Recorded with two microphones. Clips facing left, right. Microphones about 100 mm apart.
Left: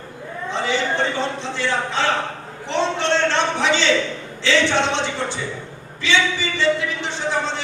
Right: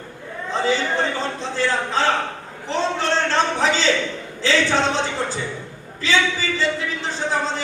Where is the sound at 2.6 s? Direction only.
35° right (ahead or behind).